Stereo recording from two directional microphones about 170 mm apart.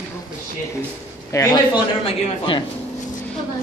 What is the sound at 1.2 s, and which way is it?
A man's voice, 20° left (ahead or behind).